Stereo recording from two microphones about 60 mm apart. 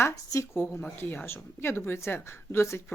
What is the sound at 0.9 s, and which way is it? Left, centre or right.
A woman's voice, left.